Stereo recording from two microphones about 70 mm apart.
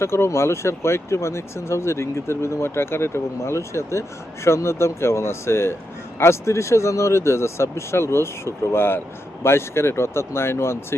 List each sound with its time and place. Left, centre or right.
0.0 s speech: left